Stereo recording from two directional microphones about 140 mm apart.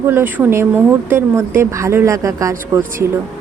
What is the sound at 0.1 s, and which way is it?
Speech, 15° right (ahead or behind).